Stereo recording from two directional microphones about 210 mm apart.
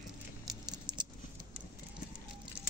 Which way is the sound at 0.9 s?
20° right (ahead or behind).